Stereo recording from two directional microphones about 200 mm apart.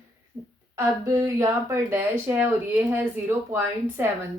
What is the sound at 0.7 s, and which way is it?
A woman's voice, 15° right (ahead or behind).